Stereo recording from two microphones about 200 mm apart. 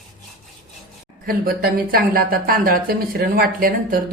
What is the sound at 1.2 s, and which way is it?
Speech, 45° right (ahead or behind).